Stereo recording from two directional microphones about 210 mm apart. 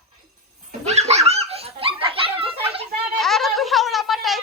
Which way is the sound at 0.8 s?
30° right (ahead or behind).